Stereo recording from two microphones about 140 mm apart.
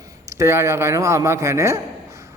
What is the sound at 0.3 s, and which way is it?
A man's voice, 20° right (ahead or behind).